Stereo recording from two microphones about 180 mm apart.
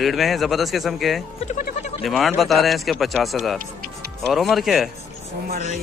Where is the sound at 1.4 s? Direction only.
45° left (ahead or behind).